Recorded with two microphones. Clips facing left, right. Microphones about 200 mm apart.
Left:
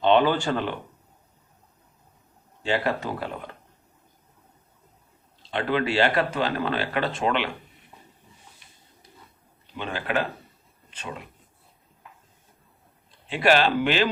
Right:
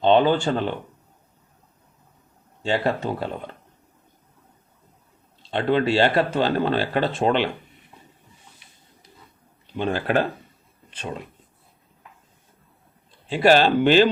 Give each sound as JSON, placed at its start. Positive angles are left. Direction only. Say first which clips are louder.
{"t": 0.1, "sound": "speech", "louder": "right 3 dB", "side_deg": -25}
{"t": 2.6, "sound": "speech", "louder": "right 3 dB", "side_deg": -25}
{"t": 5.5, "sound": "speech", "louder": "right 4 dB", "side_deg": -30}
{"t": 9.7, "sound": "speech", "louder": "right 6 dB", "side_deg": -40}
{"t": 13.3, "sound": "speech", "louder": "right 4 dB", "side_deg": -35}